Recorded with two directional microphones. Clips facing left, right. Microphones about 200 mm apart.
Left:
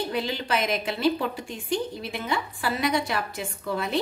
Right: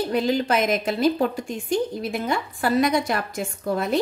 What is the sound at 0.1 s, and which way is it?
A woman's voice, 45° right (ahead or behind).